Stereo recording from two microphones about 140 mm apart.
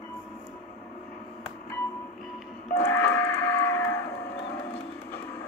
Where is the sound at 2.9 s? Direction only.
15° left (ahead or behind).